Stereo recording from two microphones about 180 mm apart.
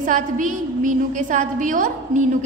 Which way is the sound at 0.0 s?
45° right (ahead or behind).